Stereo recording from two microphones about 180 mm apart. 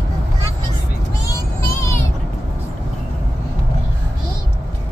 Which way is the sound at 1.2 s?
15° left (ahead or behind).